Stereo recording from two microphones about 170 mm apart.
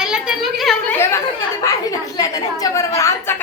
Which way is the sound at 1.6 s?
20° left (ahead or behind).